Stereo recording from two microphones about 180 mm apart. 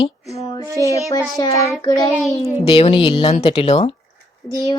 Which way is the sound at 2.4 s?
30° left (ahead or behind).